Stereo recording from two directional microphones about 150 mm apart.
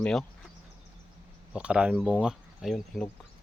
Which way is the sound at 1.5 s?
5° right (ahead or behind).